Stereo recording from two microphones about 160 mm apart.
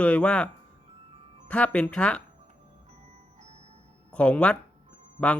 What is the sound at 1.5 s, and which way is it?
Speech, 10° left (ahead or behind).